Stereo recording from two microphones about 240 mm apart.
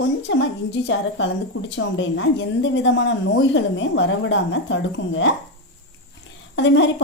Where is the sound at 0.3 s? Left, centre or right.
Left.